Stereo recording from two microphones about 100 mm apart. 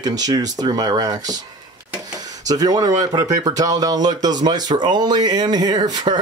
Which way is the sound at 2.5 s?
40° right (ahead or behind).